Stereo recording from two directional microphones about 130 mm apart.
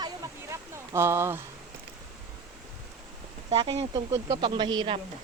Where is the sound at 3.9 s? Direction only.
30° right (ahead or behind).